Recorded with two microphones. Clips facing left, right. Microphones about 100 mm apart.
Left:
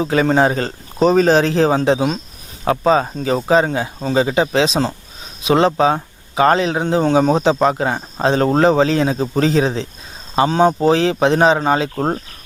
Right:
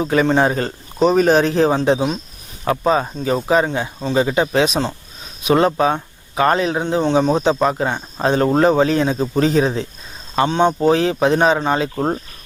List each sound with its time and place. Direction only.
0.0 s speech: 35° left (ahead or behind)